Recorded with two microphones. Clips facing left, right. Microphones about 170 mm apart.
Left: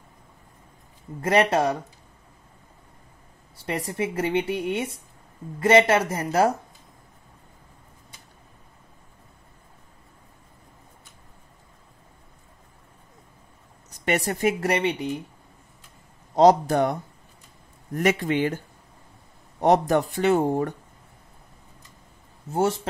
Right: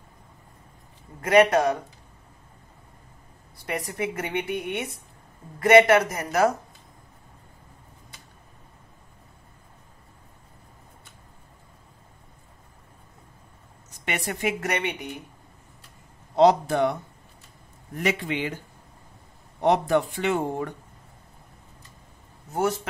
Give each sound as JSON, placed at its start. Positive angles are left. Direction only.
{"t": 1.5, "sound": "speech", "side_deg": 30}
{"t": 3.6, "sound": "speech", "side_deg": 30}
{"t": 13.8, "sound": "speech", "side_deg": 40}
{"t": 16.3, "sound": "speech", "side_deg": 40}
{"t": 17.9, "sound": "speech", "side_deg": 45}
{"t": 19.6, "sound": "speech", "side_deg": 40}
{"t": 22.5, "sound": "speech", "side_deg": 25}